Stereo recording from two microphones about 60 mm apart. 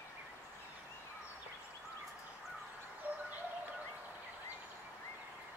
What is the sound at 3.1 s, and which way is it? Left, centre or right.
Bird, right.